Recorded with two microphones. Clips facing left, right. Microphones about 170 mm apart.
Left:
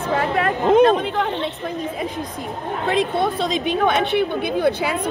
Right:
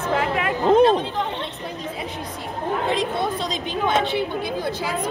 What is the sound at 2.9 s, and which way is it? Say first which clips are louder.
Speech: left 8 dB; 60° left (ahead or behind).